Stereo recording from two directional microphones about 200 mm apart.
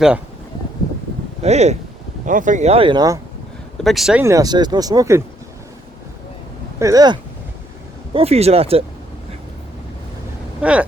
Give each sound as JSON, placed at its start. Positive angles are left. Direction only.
{"t": 1.4, "sound": "speech", "side_deg": -35}
{"t": 3.8, "sound": "speech", "side_deg": 0}
{"t": 6.7, "sound": "speech", "side_deg": -15}
{"t": 8.1, "sound": "speech", "side_deg": -30}
{"t": 10.6, "sound": "speech", "side_deg": -5}